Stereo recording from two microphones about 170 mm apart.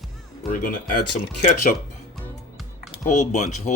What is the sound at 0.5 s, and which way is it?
Speech, 55° left (ahead or behind).